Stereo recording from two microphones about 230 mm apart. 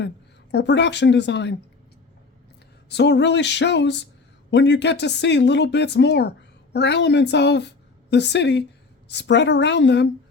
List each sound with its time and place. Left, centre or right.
0.5 s speech: left
2.9 s speech: left